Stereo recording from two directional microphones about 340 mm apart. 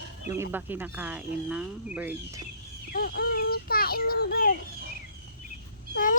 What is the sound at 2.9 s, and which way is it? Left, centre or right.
A child's voice, left.